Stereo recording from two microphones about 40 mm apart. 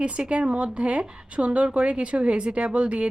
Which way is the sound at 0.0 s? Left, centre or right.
Right.